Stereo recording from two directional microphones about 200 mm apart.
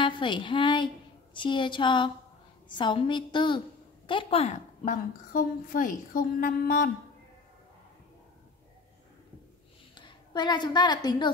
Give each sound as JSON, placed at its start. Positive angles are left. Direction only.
{"t": 0.0, "sound": "a woman's voice", "side_deg": 25}
{"t": 9.9, "sound": "a woman's voice", "side_deg": 25}